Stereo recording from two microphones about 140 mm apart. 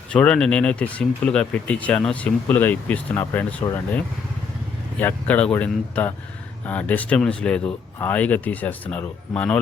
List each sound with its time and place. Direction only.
0.1 s speech: 5° left (ahead or behind)
4.9 s speech: 10° left (ahead or behind)